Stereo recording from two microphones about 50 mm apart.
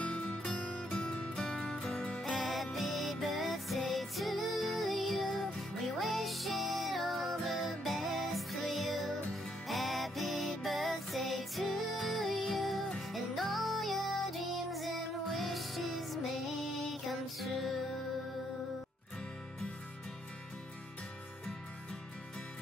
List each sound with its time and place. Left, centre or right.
0.0 s music: left
2.2 s music: centre